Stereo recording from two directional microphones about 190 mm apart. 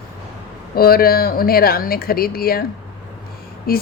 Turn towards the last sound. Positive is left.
turn(degrees=50)  # may be behind; listen again after turning